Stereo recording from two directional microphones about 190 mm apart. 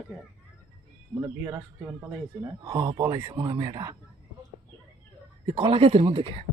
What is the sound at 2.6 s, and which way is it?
Speech, 25° right (ahead or behind).